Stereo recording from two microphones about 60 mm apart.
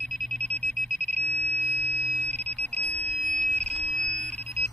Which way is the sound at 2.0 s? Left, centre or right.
Centre.